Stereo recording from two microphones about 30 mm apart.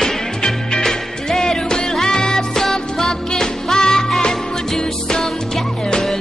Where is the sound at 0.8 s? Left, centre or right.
Centre.